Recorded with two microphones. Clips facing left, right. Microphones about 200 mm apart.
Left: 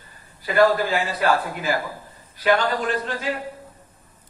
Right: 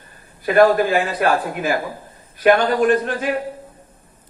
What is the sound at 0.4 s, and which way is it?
Speech, 55° right (ahead or behind).